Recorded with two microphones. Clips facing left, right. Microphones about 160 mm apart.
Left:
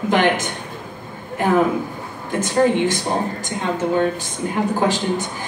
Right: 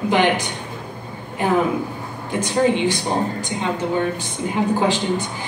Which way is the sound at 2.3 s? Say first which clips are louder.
Left 1 dB; 15° right (ahead or behind).